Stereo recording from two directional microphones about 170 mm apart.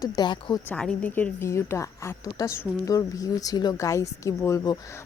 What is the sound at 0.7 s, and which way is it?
A woman's voice, 5° left (ahead or behind).